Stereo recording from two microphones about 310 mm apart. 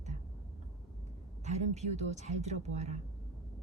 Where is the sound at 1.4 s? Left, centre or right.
Right.